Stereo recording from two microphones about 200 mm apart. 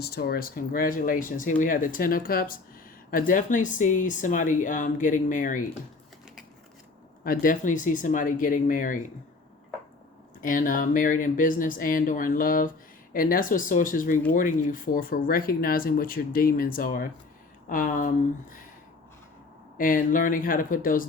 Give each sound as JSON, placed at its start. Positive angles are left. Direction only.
{"t": 0.0, "sound": "speech", "side_deg": 50}
{"t": 7.3, "sound": "speech", "side_deg": 40}
{"t": 10.4, "sound": "speech", "side_deg": 40}
{"t": 19.7, "sound": "speech", "side_deg": 45}